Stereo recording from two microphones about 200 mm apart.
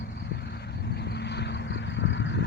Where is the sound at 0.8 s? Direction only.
55° left (ahead or behind).